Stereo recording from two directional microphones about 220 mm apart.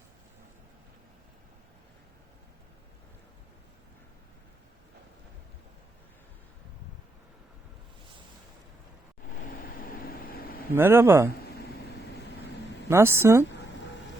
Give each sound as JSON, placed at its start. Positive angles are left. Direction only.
{"t": 9.8, "sound": "vehicle", "side_deg": 40}
{"t": 10.8, "sound": "speech", "side_deg": -10}
{"t": 12.9, "sound": "speech", "side_deg": -10}